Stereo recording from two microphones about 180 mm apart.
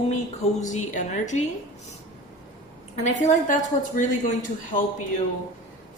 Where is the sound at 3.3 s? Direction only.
45° left (ahead or behind).